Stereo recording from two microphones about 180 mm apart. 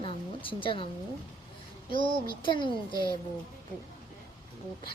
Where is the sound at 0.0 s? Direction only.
30° left (ahead or behind).